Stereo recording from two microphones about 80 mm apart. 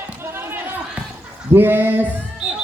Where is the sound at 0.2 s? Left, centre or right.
Right.